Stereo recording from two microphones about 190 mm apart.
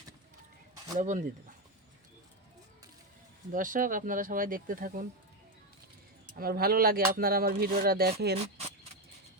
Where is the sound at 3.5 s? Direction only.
45° right (ahead or behind).